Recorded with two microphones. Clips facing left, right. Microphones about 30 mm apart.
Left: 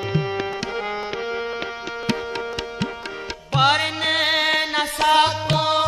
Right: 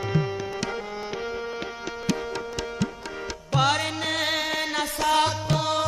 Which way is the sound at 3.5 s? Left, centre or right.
Left.